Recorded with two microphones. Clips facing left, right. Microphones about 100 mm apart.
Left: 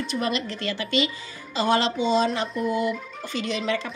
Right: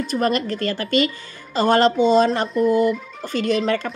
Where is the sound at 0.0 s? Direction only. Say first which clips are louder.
Right 6 dB; 45° right (ahead or behind).